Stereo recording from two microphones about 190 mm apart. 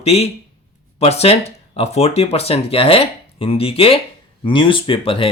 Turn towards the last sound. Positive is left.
turn(degrees=25)  # may be behind; listen again after turning